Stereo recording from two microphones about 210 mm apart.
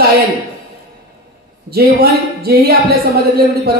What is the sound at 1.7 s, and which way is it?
Speech, 45° right (ahead or behind).